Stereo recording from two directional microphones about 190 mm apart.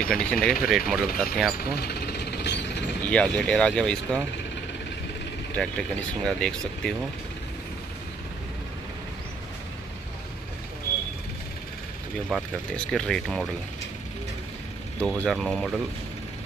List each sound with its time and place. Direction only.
0.0 s speech: 5° left (ahead or behind)
1.6 s jackhammer: 55° left (ahead or behind)
3.1 s speech: 5° left (ahead or behind)
5.6 s speech: 5° left (ahead or behind)
12.3 s speech: centre (ahead or behind)
15.0 s speech: 5° left (ahead or behind)